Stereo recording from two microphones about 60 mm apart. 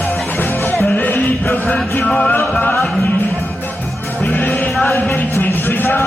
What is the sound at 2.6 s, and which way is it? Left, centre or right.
Music, left.